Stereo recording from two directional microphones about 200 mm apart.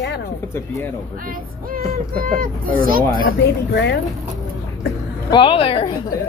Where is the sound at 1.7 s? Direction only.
45° right (ahead or behind).